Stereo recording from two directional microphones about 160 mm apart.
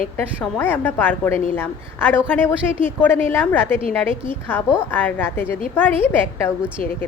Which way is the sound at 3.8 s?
35° right (ahead or behind).